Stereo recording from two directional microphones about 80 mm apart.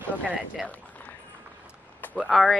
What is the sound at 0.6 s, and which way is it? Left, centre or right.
Speech, centre.